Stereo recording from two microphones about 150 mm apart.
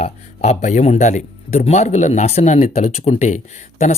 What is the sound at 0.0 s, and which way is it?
Speech, 50° left (ahead or behind).